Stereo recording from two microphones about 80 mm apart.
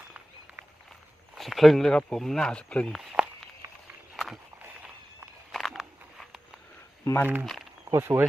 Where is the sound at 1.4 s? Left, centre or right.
Centre.